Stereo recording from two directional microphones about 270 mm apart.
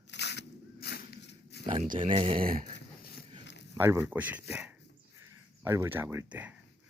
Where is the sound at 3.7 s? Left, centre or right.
Centre.